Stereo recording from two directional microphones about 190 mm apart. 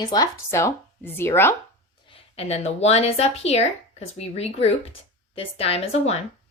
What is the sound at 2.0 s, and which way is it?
A woman's voice, 30° left (ahead or behind).